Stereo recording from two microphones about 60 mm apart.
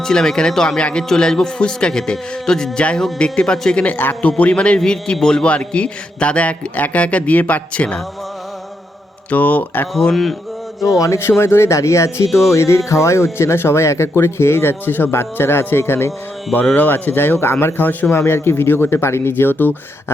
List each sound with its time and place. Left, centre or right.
0.0 s a man's voice: centre
3.8 s speech: left
4.2 s a man's voice: left
9.3 s a man's voice: left
10.0 s speech: centre
10.8 s a sound: centre
11.2 s speech: left
16.7 s speech: left
18.1 s speech: left